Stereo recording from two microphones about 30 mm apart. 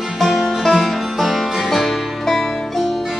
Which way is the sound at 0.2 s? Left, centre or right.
Centre.